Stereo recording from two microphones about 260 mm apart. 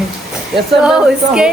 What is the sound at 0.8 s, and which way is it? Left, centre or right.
Speech, centre.